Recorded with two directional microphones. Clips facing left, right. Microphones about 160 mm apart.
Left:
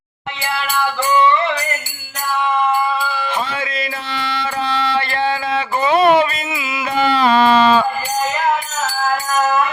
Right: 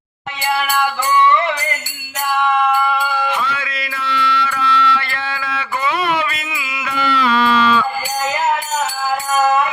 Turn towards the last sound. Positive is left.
turn(degrees=35)  # may be behind; listen again after turning